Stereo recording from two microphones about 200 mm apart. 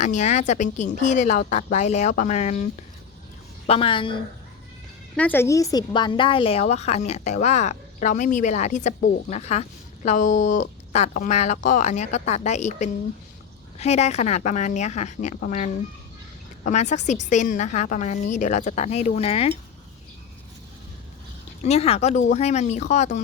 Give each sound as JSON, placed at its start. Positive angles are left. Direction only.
{"t": 0.0, "sound": "a woman's voice", "side_deg": 35}
{"t": 3.7, "sound": "a woman's voice", "side_deg": 25}
{"t": 5.1, "sound": "a woman's voice", "side_deg": 10}
{"t": 21.6, "sound": "a woman's voice", "side_deg": 30}